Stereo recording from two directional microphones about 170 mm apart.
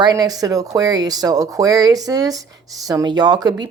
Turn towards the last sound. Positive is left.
turn(degrees=-25)  # may be behind; listen again after turning